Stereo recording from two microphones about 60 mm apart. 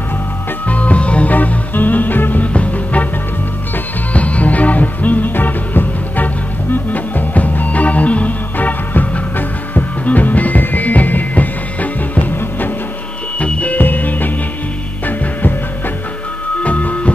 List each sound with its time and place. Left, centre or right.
0.7 s music: left
4.1 s music: left
13.4 s music: left
16.6 s music: left